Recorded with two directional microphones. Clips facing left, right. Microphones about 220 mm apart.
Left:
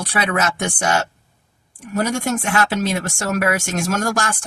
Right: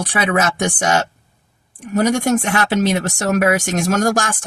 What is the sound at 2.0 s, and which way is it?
Speech, 40° right (ahead or behind).